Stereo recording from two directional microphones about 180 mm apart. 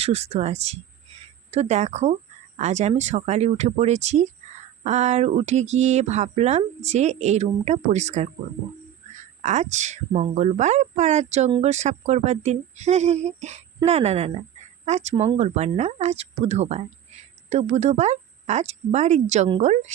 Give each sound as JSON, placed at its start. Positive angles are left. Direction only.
{"t": 0.0, "sound": "speech", "side_deg": -35}
{"t": 9.4, "sound": "speech", "side_deg": -40}